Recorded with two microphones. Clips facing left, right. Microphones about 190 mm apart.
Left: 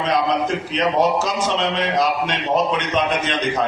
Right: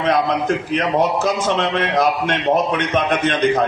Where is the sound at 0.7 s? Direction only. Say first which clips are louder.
Left 1 dB; 55° right (ahead or behind).